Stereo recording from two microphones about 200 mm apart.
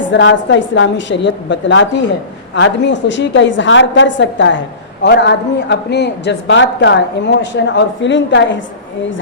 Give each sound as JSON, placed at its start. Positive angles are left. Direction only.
{"t": 0.1, "sound": "a woman's voice", "side_deg": 65}